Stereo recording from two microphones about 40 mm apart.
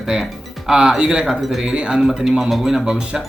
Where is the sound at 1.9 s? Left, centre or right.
Centre.